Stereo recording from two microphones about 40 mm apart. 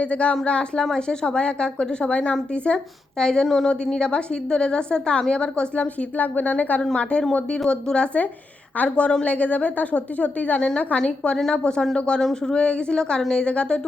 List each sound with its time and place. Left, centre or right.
0.0 s a woman's voice: left
6.1 s a woman's voice: left
12.2 s a woman's voice: centre